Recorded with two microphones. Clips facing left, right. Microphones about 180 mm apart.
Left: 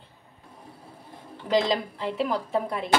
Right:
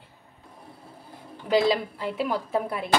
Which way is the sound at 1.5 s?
5° right (ahead or behind).